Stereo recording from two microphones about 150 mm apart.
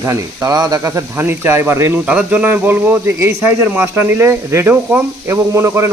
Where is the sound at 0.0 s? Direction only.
20° right (ahead or behind).